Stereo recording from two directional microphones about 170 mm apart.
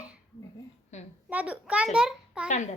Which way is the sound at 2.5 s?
45° left (ahead or behind).